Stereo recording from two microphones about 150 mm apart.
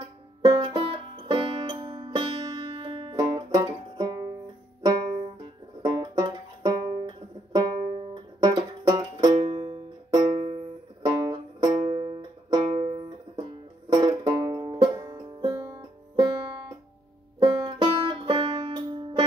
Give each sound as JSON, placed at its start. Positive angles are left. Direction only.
{"t": 0.5, "sound": "music", "side_deg": -35}
{"t": 5.8, "sound": "music", "side_deg": -25}
{"t": 9.1, "sound": "music", "side_deg": -40}
{"t": 11.0, "sound": "music", "side_deg": -25}
{"t": 13.4, "sound": "banjo", "side_deg": -30}
{"t": 16.2, "sound": "music", "side_deg": -30}